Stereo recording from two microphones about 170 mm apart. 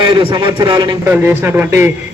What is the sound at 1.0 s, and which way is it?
Speech, 10° right (ahead or behind).